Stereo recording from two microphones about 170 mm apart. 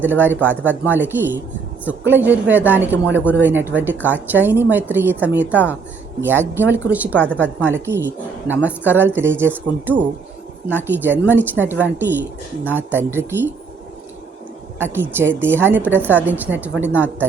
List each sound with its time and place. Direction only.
0.0 s a woman's voice: 10° right (ahead or behind)
5.5 s a woman's voice: 10° left (ahead or behind)
6.1 s a woman's voice: 10° right (ahead or behind)
7.2 s a woman's voice: 10° left (ahead or behind)
7.6 s a woman's voice: 15° right (ahead or behind)
14.8 s a woman's voice: 10° right (ahead or behind)